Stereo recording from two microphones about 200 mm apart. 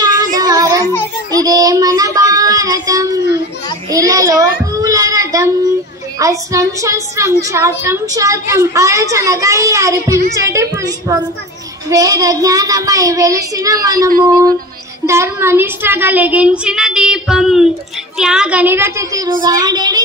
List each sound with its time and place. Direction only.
0.4 s child singing: 20° right (ahead or behind)
3.9 s a sound: 15° right (ahead or behind)
4.7 s child singing: 15° right (ahead or behind)
6.1 s a woman's voice: 15° right (ahead or behind)
14.2 s child singing: 20° right (ahead or behind)
15.0 s a woman's voice: 15° right (ahead or behind)
19.4 s child singing: 20° right (ahead or behind)